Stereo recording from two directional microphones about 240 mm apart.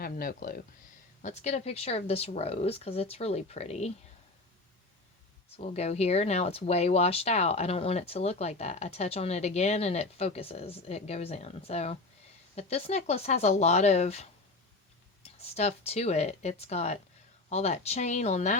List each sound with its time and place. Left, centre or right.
0.0 s speech: left
5.5 s speech: left